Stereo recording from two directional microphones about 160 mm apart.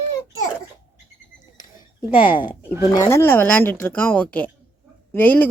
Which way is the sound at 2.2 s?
30° left (ahead or behind).